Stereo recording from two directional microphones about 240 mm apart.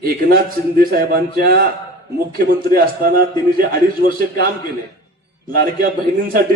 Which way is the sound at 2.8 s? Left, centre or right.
Right.